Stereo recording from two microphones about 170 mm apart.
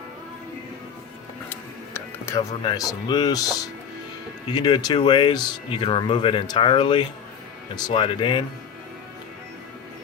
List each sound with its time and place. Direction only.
1.9 s music: 15° left (ahead or behind)
2.6 s speech: 25° left (ahead or behind)
4.5 s speech: 25° left (ahead or behind)